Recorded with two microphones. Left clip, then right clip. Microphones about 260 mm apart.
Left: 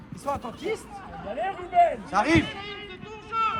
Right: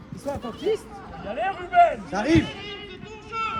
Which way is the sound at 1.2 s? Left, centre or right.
Right.